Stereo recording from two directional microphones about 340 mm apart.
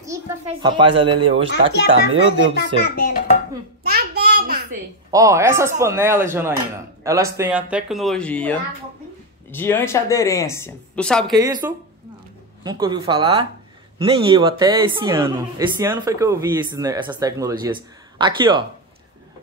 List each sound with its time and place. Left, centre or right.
0.0 s speech: centre
2.5 s a child's voice: left
3.8 s child singing: right
5.1 s speech: centre
11.3 s speech: centre